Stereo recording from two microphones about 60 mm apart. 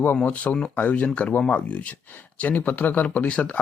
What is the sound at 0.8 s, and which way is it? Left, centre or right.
Speech, left.